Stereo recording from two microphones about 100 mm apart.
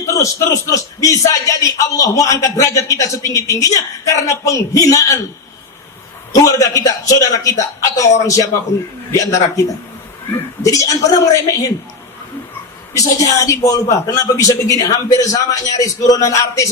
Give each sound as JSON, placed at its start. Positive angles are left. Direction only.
{"t": 0.1, "sound": "a man's voice", "side_deg": 30}
{"t": 6.3, "sound": "a man's voice", "side_deg": 30}
{"t": 10.6, "sound": "a man's voice", "side_deg": 35}
{"t": 13.0, "sound": "a man's voice", "side_deg": 35}